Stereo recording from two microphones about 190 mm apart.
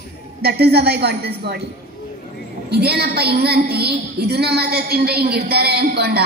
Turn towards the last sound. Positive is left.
turn(degrees=-55)  # may be behind; listen again after turning